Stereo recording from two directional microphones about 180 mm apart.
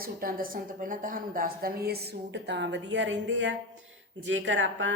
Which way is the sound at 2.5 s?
80° right.